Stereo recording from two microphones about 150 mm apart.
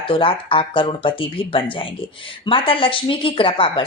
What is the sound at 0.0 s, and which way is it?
Speech, 35° left (ahead or behind).